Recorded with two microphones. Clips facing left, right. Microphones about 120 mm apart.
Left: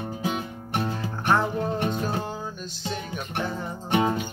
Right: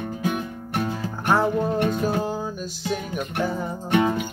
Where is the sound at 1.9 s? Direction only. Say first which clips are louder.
Right 5 dB; 5° right (ahead or behind).